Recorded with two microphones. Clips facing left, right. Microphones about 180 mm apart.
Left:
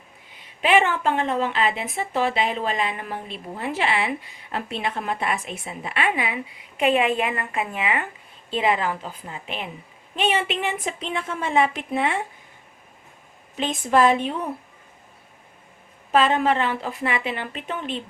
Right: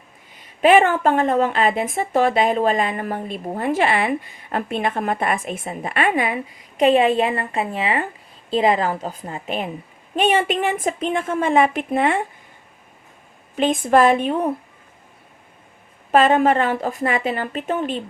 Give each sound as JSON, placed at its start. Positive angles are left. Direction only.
{"t": 0.6, "sound": "a woman's voice", "side_deg": -45}
{"t": 13.6, "sound": "a woman's voice", "side_deg": -50}
{"t": 16.1, "sound": "a woman's voice", "side_deg": -50}